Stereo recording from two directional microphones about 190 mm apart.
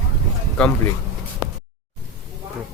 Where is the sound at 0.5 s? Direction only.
5° left (ahead or behind).